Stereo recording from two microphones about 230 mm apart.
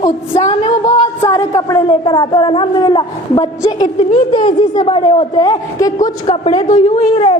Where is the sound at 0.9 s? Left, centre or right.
Left.